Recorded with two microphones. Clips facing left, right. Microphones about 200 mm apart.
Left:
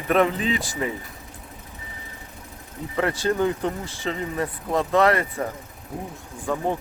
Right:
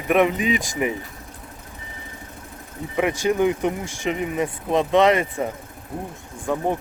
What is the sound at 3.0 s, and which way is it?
Speech, 15° right (ahead or behind).